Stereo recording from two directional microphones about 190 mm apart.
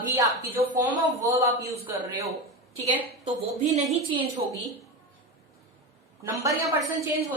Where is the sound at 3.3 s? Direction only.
35° right (ahead or behind).